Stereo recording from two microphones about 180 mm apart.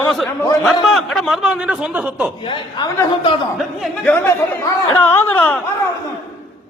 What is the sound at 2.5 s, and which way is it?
Speech, 25° left (ahead or behind).